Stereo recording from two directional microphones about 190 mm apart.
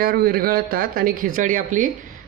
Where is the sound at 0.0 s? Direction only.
50° right (ahead or behind).